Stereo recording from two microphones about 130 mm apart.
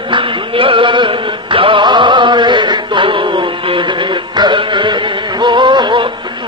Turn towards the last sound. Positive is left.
turn(degrees=-35)  # may be behind; listen again after turning